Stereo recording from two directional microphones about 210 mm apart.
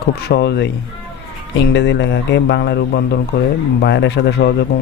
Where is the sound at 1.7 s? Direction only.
55° left (ahead or behind).